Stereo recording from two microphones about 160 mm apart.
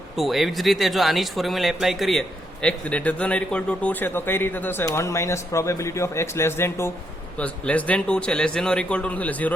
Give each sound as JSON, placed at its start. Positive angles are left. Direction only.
{"t": 0.2, "sound": "speech", "side_deg": 0}